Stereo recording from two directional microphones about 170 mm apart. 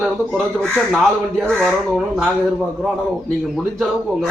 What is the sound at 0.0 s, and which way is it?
Speech, 5° left (ahead or behind).